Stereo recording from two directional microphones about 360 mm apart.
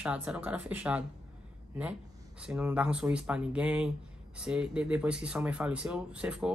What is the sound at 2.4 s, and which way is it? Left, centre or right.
Speech, centre.